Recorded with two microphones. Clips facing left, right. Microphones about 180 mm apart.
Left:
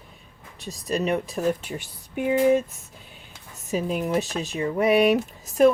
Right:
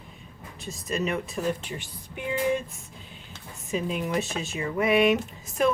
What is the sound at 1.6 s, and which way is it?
Speech, 45° left (ahead or behind).